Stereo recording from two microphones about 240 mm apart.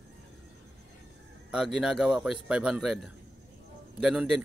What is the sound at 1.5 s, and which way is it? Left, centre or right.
A man's voice, centre.